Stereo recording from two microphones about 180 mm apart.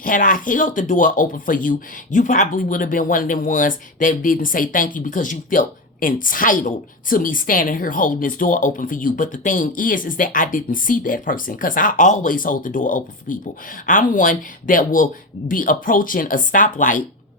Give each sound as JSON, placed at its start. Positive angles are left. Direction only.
{"t": 0.0, "sound": "speech", "side_deg": 50}